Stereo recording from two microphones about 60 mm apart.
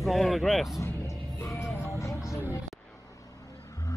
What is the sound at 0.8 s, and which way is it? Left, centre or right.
Music, left.